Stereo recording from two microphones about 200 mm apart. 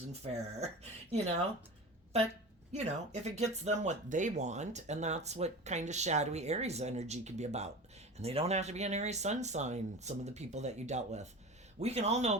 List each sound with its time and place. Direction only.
0.1 s speech: 30° right (ahead or behind)
2.7 s speech: 35° right (ahead or behind)